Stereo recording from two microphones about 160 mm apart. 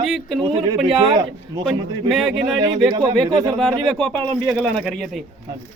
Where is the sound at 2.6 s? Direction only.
25° right (ahead or behind).